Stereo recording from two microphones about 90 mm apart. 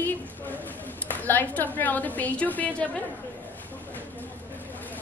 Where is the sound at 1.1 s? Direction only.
20° left (ahead or behind).